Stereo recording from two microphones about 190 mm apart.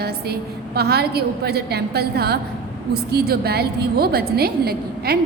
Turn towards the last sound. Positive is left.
turn(degrees=-55)  # may be behind; listen again after turning